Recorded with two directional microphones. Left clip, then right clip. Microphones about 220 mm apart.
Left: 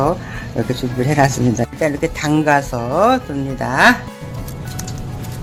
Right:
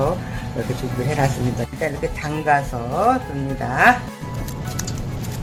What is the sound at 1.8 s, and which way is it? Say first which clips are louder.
Speech: left 5 dB; 45° left (ahead or behind).